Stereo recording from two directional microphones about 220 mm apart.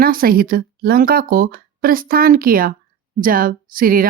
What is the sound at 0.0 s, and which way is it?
Speech, 40° right (ahead or behind).